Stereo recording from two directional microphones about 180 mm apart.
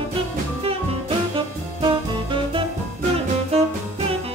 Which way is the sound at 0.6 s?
30° right (ahead or behind).